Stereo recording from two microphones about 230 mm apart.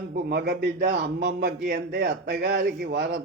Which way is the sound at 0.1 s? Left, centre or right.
Right.